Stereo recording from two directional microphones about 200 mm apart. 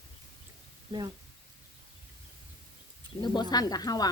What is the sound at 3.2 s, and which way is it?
Speech, 20° left (ahead or behind).